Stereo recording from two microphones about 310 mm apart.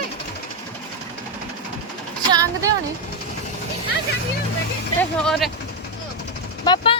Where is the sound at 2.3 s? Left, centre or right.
Centre.